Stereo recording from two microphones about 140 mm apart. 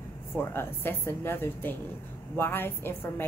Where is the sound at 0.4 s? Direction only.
15° left (ahead or behind).